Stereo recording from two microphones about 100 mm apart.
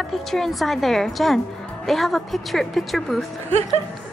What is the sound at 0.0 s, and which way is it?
A woman's voice, centre (ahead or behind).